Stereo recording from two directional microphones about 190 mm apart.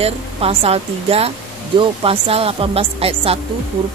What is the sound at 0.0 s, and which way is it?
A woman's voice, 30° right (ahead or behind).